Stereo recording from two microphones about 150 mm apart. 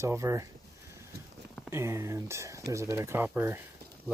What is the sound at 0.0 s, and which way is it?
Speech, 20° right (ahead or behind).